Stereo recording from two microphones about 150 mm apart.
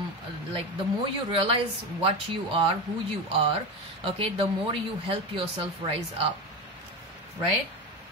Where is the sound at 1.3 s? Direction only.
35° right (ahead or behind).